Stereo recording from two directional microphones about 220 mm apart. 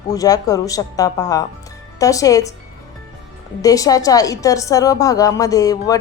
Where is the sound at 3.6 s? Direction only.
15° left (ahead or behind).